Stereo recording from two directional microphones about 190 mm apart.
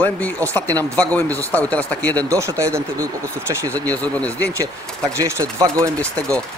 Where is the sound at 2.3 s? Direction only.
15° right (ahead or behind).